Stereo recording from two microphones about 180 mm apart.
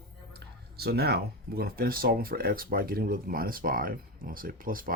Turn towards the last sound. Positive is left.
turn(degrees=-50)  # may be behind; listen again after turning